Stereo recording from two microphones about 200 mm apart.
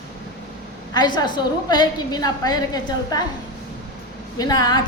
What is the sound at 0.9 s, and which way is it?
A woman's voice, 20° left (ahead or behind).